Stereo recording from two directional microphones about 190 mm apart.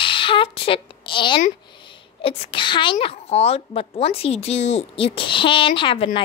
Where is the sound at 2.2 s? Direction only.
30° left (ahead or behind).